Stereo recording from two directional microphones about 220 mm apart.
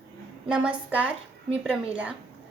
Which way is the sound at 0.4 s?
5° right (ahead or behind).